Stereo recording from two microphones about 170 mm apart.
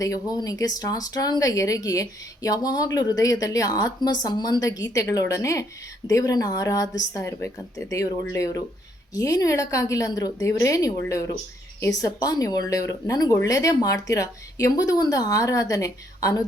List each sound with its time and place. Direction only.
0.0 s speech: 20° left (ahead or behind)
11.9 s speech: 20° left (ahead or behind)